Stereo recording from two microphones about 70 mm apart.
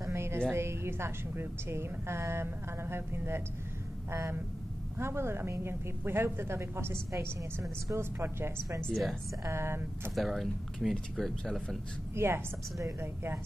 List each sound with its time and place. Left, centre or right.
0.5 s a woman's voice: right
8.8 s speech: centre
9.4 s a woman's voice: right
10.1 s speech: centre
12.2 s a woman's voice: right